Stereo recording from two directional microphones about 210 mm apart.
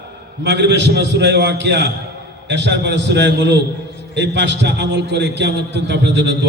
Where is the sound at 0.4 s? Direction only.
55° right (ahead or behind).